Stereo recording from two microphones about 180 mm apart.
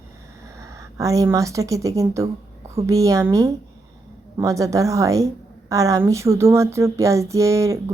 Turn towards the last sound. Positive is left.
turn(degrees=-15)  # may be behind; listen again after turning